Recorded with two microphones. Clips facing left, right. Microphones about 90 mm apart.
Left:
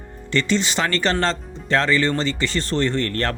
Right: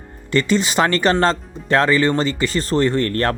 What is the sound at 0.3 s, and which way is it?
Speech, 45° right (ahead or behind).